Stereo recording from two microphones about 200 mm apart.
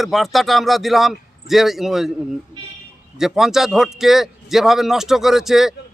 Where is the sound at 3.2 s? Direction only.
Centre (ahead or behind).